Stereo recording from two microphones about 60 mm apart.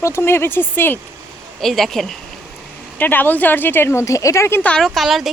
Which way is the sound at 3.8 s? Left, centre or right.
Left.